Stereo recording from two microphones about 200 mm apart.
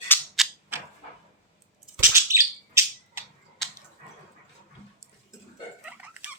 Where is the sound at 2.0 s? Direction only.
10° right (ahead or behind).